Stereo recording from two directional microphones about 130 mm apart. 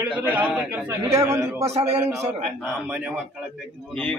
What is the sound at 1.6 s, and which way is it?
Speech, 55° right (ahead or behind).